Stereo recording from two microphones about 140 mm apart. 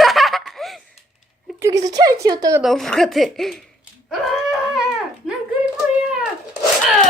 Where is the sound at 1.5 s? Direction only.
20° right (ahead or behind).